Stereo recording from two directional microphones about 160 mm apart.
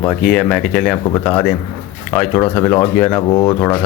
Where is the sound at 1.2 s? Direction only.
15° left (ahead or behind).